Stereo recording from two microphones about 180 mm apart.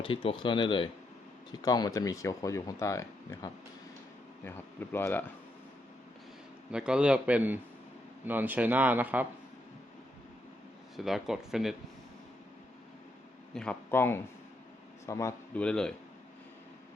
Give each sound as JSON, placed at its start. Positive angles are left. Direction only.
{"t": 0.0, "sound": "speech", "side_deg": 30}
{"t": 6.7, "sound": "a man's voice", "side_deg": -5}
{"t": 10.9, "sound": "a man's voice", "side_deg": 0}
{"t": 13.5, "sound": "speech", "side_deg": 5}
{"t": 15.6, "sound": "a man's voice", "side_deg": 5}